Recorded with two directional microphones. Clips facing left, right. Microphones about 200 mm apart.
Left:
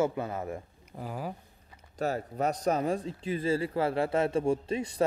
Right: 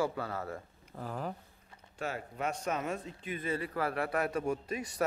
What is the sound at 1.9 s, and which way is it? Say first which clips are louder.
Speech: left 7 dB; 40° left (ahead or behind).